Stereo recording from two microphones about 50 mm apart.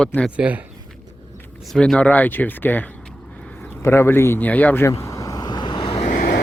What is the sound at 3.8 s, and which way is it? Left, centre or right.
Speech, left.